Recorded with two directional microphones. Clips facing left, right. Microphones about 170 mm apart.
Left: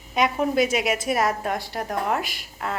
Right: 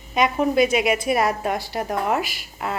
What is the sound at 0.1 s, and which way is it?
A woman's voice, centre (ahead or behind).